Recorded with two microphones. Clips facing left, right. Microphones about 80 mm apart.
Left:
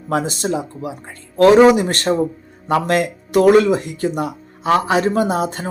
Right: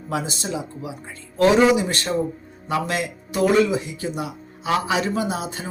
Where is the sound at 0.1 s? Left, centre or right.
Left.